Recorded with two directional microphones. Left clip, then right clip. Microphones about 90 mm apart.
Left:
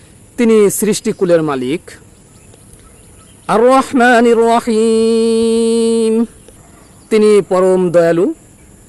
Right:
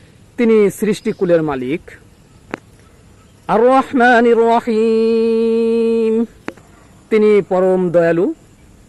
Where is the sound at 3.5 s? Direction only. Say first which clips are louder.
Left 2 dB; 30° left (ahead or behind).